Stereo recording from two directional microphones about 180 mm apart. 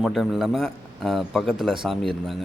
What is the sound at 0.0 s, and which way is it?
A man's voice, centre (ahead or behind).